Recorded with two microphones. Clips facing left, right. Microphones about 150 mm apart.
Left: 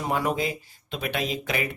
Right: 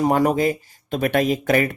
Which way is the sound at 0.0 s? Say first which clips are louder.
Right 8 dB; 40° right (ahead or behind).